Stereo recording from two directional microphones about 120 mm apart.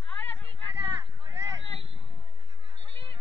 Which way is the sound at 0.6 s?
40° right (ahead or behind).